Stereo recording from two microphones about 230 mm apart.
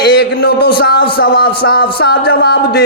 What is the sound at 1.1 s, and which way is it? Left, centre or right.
A man's voice, left.